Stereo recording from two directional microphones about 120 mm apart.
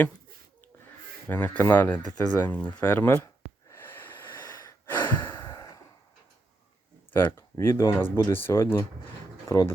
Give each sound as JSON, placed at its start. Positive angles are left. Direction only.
{"t": 1.3, "sound": "speech", "side_deg": 15}
{"t": 3.7, "sound": "breathing", "side_deg": 20}
{"t": 5.4, "sound": "a sound", "side_deg": 25}
{"t": 7.1, "sound": "speech", "side_deg": 20}